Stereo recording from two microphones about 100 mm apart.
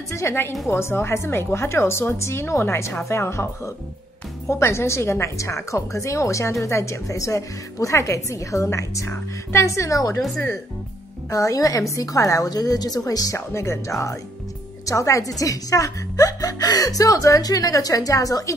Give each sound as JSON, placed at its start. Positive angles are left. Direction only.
{"t": 0.1, "sound": "a woman's voice", "side_deg": 25}
{"t": 11.2, "sound": "speech", "side_deg": 35}